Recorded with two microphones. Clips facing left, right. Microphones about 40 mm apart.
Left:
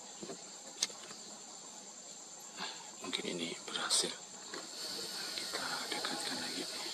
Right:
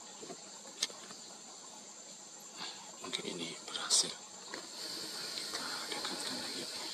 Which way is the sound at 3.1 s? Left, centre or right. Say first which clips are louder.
Left 2 dB; centre.